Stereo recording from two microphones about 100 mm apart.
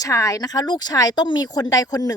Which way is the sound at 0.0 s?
30° left (ahead or behind).